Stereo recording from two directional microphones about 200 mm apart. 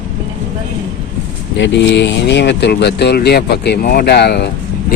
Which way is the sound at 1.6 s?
60° left (ahead or behind).